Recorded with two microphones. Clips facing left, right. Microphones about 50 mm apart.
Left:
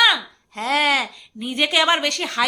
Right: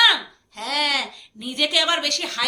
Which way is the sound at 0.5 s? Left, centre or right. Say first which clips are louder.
Left 5 dB; left.